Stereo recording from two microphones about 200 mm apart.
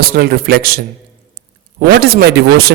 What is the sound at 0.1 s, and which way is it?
Speech, 50° right (ahead or behind).